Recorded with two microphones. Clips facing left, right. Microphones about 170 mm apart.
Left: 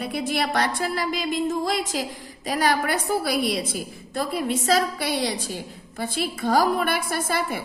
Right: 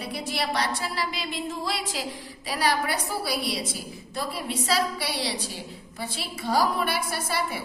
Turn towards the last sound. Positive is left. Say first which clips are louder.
# left 4 dB
turn(degrees=50)  # may be behind; listen again after turning